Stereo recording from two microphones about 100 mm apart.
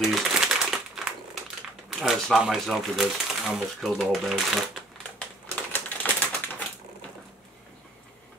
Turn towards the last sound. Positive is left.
turn(degrees=15)  # may be behind; listen again after turning